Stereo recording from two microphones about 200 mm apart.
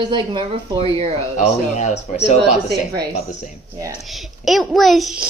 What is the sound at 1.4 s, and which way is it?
A man's voice, 35° left (ahead or behind).